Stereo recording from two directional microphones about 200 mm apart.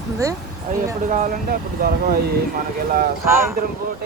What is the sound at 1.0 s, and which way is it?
Speech, 40° right (ahead or behind).